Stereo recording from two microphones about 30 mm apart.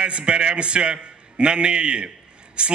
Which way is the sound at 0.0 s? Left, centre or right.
Right.